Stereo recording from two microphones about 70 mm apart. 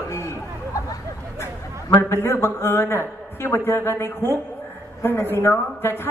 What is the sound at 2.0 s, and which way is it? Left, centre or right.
A man's voice, left.